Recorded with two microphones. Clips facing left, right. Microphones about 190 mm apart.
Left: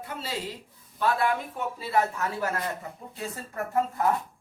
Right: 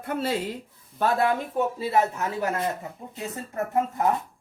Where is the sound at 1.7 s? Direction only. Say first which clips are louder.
Left 2 dB; 20° right (ahead or behind).